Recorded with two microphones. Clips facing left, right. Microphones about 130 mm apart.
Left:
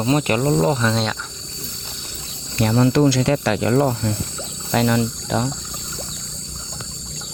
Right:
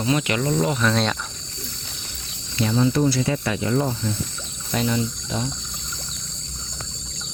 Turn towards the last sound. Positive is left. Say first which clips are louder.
# left 5 dB
turn(degrees=75)  # may be behind; listen again after turning